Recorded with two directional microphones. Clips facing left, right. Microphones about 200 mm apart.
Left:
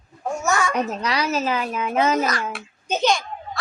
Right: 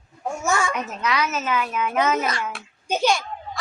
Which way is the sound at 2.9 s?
10° right (ahead or behind).